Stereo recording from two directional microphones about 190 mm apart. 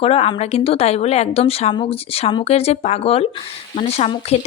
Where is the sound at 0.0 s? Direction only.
30° left (ahead or behind).